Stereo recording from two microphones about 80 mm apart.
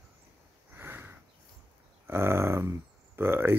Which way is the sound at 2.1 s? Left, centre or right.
Right.